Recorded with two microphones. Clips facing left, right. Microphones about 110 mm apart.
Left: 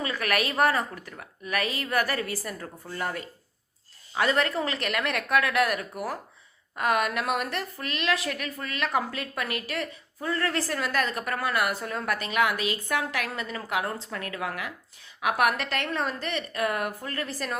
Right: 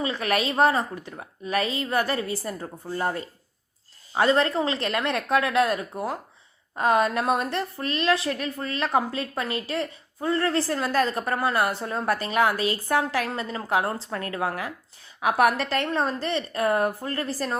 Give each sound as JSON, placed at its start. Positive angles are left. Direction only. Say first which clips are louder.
{"t": 0.0, "sound": "a woman's voice", "louder": "right 3 dB", "side_deg": -25}